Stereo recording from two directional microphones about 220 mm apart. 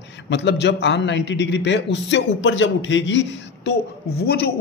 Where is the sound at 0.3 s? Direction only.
50° left (ahead or behind).